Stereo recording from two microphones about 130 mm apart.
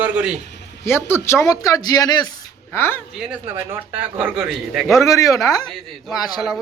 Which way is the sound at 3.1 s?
5° right (ahead or behind).